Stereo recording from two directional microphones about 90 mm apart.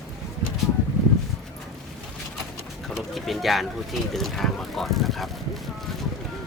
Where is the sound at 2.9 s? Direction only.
Centre (ahead or behind).